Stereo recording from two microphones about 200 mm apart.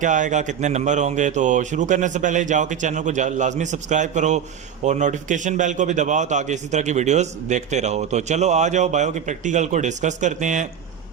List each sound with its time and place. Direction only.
0.0 s a man's voice: 40° right (ahead or behind)